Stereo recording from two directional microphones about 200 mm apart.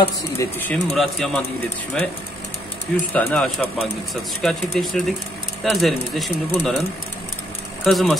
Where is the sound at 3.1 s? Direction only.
5° left (ahead or behind).